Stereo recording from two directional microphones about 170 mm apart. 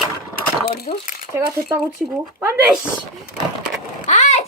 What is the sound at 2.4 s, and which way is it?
Speech, 10° right (ahead or behind).